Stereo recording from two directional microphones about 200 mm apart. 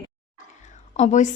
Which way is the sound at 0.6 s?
35° left (ahead or behind).